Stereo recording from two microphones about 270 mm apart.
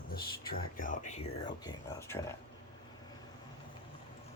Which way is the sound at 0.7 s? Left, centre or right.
Left.